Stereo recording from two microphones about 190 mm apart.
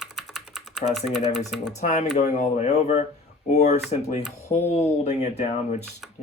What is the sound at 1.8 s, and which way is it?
Speech, 35° left (ahead or behind).